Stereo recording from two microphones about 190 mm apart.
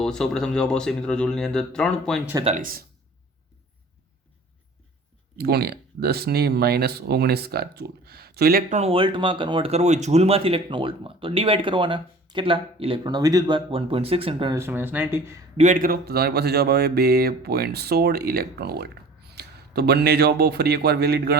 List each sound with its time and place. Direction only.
0.0 s speech: 5° left (ahead or behind)
2.4 s speech: 35° right (ahead or behind)
5.4 s speech: 55° right (ahead or behind)
8.7 s speech: 30° right (ahead or behind)
14.5 s speech: 10° right (ahead or behind)
15.5 s speech: 40° right (ahead or behind)